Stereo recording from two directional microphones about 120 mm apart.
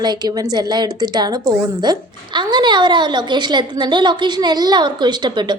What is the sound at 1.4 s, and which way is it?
Speech, 25° right (ahead or behind).